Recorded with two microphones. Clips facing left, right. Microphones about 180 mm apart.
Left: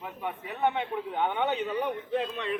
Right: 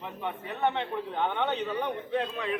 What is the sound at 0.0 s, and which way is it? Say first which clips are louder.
A man's voice: even; 5° left (ahead or behind).